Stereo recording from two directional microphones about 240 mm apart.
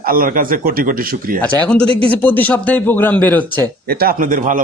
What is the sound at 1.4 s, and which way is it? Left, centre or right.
A man's voice, centre.